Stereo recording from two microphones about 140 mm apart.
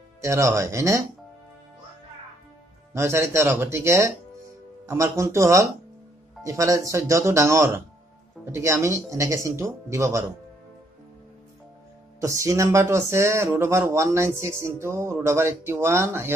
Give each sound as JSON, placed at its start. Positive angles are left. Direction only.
{"t": 0.2, "sound": "speech", "side_deg": -20}
{"t": 2.9, "sound": "speech", "side_deg": -20}
{"t": 12.2, "sound": "speech", "side_deg": -25}